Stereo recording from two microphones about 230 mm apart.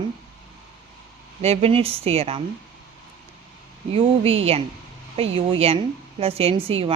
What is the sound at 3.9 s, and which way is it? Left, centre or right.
A woman's voice, right.